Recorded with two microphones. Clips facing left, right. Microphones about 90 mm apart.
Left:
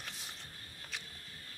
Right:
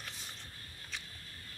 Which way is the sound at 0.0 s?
Centre (ahead or behind).